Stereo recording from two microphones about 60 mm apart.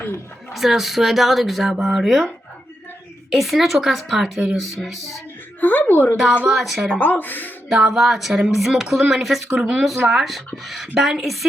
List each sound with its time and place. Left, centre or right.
0.5 s speech: centre
3.3 s speech: centre
5.5 s speech: left
6.5 s speech: centre
7.0 s speech: left
7.7 s speech: centre